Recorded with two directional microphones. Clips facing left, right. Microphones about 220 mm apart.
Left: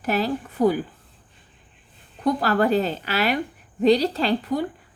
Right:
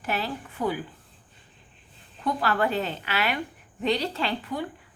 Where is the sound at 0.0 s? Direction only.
40° left (ahead or behind).